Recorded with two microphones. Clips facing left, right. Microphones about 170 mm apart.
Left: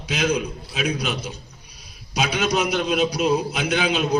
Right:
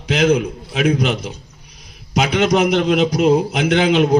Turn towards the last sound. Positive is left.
turn(degrees=-65)  # may be behind; listen again after turning